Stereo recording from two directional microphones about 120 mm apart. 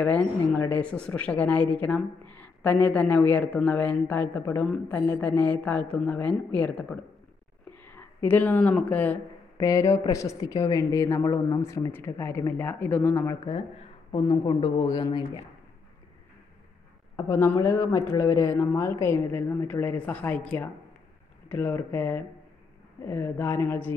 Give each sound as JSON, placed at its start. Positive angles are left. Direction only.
{"t": 0.0, "sound": "speech", "side_deg": 10}
{"t": 9.6, "sound": "a woman's voice", "side_deg": 25}
{"t": 14.1, "sound": "speech", "side_deg": 35}
{"t": 17.2, "sound": "a woman's voice", "side_deg": 25}